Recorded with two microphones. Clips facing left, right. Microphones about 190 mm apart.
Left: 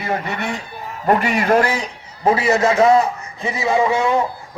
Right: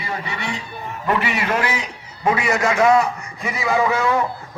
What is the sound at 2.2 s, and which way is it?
A man's voice, 30° left (ahead or behind).